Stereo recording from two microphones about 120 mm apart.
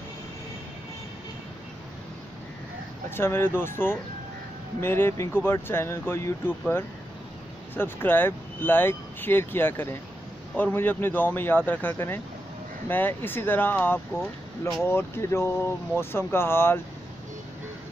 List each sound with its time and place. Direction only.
3.2 s speech: 20° left (ahead or behind)
7.7 s speech: 15° left (ahead or behind)